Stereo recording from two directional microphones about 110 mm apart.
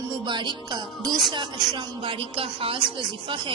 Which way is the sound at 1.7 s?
50° right (ahead or behind).